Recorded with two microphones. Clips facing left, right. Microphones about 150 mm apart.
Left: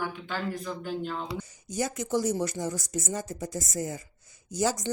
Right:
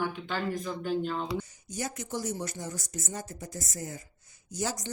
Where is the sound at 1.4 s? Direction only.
90° left.